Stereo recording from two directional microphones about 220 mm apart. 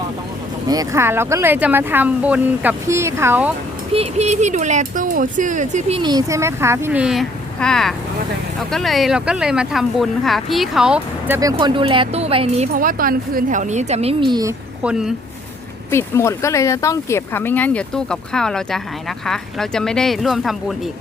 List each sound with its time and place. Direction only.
0.7 s speech: 15° right (ahead or behind)
3.9 s speech: 30° right (ahead or behind)
6.0 s speech: 20° right (ahead or behind)
11.3 s speech: 20° right (ahead or behind)
14.8 s speech: 5° right (ahead or behind)
15.9 s speech: 10° left (ahead or behind)